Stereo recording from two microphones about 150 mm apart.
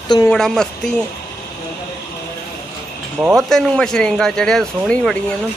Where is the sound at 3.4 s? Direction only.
Centre (ahead or behind).